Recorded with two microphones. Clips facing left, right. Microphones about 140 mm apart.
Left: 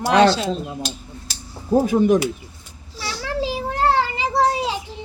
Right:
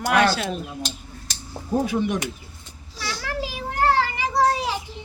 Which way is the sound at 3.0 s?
30° left (ahead or behind).